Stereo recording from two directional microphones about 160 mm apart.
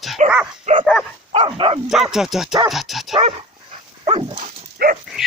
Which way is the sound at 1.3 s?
35° right (ahead or behind).